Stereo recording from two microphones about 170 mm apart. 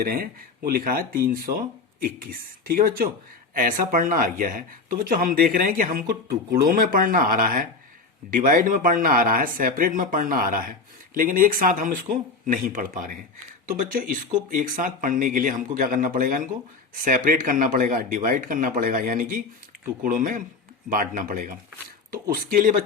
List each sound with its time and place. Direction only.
0.0 s speech: 55° right (ahead or behind)